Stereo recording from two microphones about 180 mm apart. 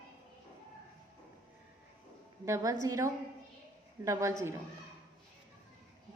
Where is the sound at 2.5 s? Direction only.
15° right (ahead or behind).